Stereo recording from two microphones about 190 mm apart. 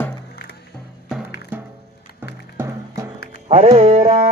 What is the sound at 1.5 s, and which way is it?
Music, 10° right (ahead or behind).